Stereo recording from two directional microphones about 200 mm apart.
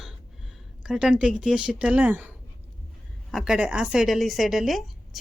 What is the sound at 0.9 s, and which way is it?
A woman's voice, 5° right (ahead or behind).